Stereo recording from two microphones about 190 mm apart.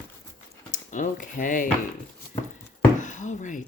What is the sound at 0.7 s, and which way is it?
Speech, 45° left (ahead or behind).